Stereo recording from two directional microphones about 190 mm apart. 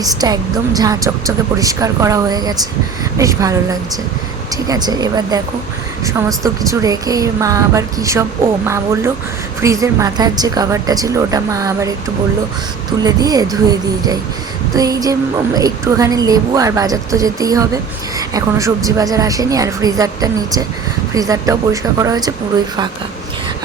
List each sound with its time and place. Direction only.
0.0 s a woman's voice: 20° right (ahead or behind)
13.0 s a woman's voice: 20° right (ahead or behind)